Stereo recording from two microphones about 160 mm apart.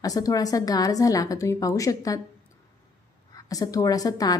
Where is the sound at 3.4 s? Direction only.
20° left (ahead or behind).